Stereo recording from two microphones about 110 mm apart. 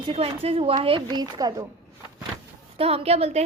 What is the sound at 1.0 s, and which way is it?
Speech, 35° right (ahead or behind).